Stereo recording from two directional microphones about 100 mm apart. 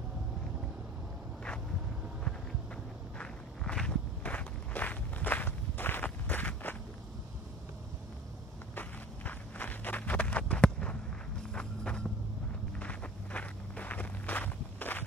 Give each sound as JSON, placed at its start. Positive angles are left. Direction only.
{"t": 3.2, "sound": "walk", "side_deg": 10}
{"t": 8.7, "sound": "walk", "side_deg": 15}
{"t": 11.5, "sound": "vehicle", "side_deg": 10}
{"t": 12.7, "sound": "walk", "side_deg": 15}